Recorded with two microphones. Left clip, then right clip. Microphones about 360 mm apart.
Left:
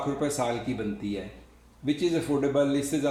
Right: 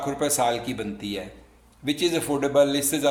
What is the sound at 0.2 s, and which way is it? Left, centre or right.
Speech, right.